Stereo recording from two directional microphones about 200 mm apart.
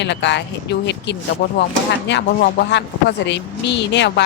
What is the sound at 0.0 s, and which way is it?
Speech, 60° left (ahead or behind).